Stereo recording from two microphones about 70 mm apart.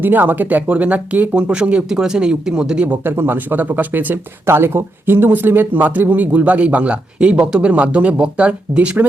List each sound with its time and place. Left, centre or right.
0.0 s speech: right